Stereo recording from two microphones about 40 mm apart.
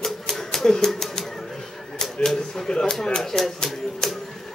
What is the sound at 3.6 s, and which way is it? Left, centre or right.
Typewriter, centre.